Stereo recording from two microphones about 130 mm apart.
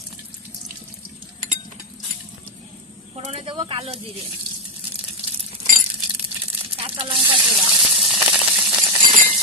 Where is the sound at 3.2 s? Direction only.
50° right (ahead or behind).